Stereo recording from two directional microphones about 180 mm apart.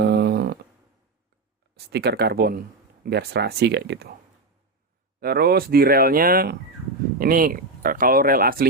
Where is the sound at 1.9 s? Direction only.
65° right (ahead or behind).